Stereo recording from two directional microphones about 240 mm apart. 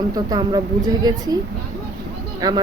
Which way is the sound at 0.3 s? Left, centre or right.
Centre.